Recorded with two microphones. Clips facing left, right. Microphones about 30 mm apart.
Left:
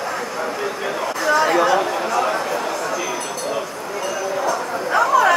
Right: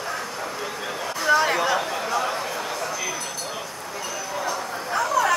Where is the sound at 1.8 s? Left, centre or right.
Centre.